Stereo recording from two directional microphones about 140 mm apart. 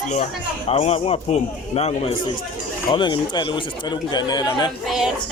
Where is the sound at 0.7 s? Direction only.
45° left (ahead or behind).